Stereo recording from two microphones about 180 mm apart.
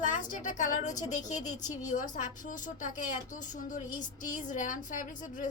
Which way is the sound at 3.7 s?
45° left (ahead or behind).